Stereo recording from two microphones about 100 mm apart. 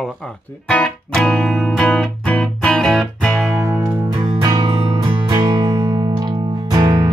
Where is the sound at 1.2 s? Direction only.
10° left (ahead or behind).